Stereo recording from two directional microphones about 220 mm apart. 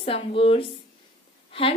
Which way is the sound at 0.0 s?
25° left (ahead or behind).